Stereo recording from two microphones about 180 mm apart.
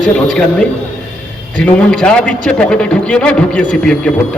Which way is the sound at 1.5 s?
5° left (ahead or behind).